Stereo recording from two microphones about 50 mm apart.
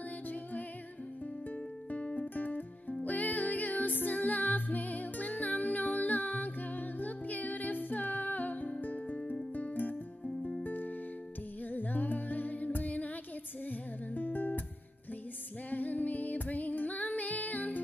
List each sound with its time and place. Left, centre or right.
0.3 s music: left
15.7 s music: left